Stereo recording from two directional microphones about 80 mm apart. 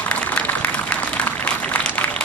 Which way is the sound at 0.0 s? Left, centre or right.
Centre.